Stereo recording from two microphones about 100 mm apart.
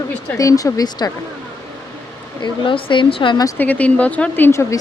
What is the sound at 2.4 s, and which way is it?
A woman's voice, 55° left (ahead or behind).